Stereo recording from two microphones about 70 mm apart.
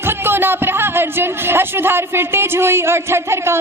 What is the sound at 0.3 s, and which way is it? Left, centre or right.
A man's voice, right.